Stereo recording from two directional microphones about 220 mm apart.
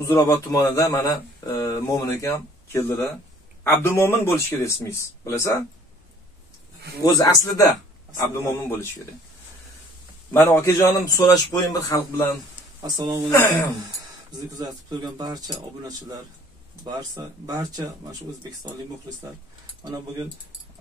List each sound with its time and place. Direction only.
0.0 s speech: 15° left (ahead or behind)
7.0 s speech: 15° left (ahead or behind)
10.3 s speech: 10° left (ahead or behind)
12.8 s speech: 15° right (ahead or behind)
13.3 s speech: 10° left (ahead or behind)
14.3 s speech: 20° right (ahead or behind)